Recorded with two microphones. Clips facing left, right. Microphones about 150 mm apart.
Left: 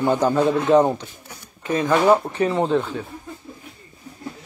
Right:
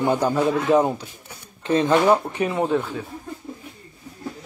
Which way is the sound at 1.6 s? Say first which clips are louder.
Right 2 dB; 30° right (ahead or behind).